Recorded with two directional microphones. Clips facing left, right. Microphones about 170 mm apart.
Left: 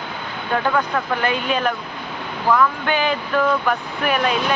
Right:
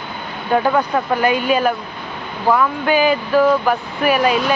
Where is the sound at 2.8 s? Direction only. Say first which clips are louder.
Right 5 dB; 5° right (ahead or behind).